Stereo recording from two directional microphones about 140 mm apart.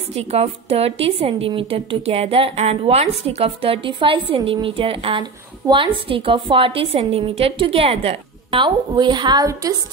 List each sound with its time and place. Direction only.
0.1 s a woman's voice: 45° right (ahead or behind)
5.6 s a woman's voice: 20° right (ahead or behind)
6.0 s a woman's voice: 40° right (ahead or behind); by 9.8 s 25° right (ahead or behind)